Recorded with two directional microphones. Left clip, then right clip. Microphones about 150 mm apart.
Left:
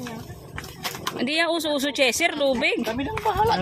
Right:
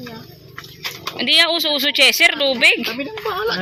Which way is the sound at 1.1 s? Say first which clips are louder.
Right 9 dB; 15° left (ahead or behind).